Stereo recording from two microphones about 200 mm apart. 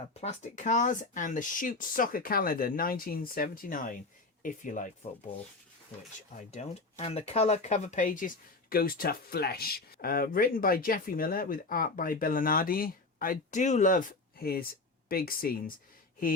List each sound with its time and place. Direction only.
0.1 s speech: 30° left (ahead or behind)
6.5 s speech: 35° left (ahead or behind)